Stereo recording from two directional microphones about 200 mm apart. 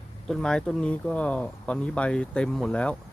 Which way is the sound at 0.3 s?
5° left (ahead or behind).